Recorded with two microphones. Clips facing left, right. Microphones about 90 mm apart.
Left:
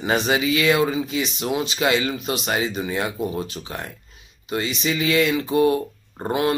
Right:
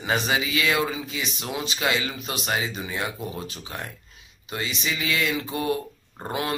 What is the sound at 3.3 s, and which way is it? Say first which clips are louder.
Speech: left 6 dB; 25° left (ahead or behind).